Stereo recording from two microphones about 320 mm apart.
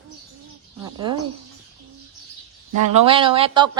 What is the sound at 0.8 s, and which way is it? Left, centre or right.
Speech, centre.